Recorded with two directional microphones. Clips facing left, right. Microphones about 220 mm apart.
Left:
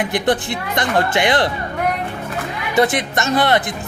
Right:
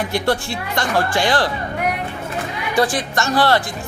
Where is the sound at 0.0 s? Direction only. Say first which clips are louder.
Left 2 dB; 20° left (ahead or behind).